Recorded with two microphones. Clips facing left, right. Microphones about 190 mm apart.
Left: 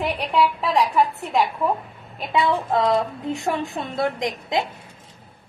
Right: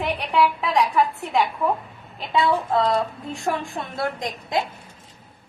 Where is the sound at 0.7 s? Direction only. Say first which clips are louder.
Left 1 dB; 10° left (ahead or behind).